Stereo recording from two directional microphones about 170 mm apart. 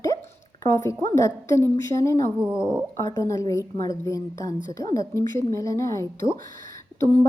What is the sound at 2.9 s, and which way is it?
A woman's voice, 20° left (ahead or behind).